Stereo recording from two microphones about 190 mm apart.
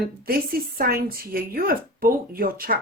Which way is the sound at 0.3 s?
50° right (ahead or behind).